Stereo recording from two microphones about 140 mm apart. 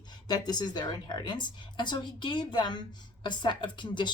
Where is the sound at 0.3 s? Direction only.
25° left (ahead or behind).